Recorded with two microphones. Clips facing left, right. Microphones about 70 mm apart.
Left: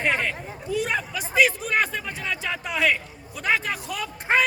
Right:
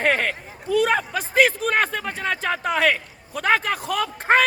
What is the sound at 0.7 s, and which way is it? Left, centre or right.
A man's voice, right.